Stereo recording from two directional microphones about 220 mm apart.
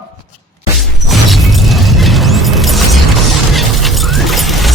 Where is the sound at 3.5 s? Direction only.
Centre (ahead or behind).